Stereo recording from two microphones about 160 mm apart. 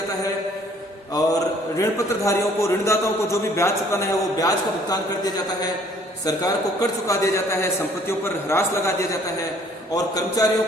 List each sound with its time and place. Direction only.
1.1 s a man's voice: 20° left (ahead or behind)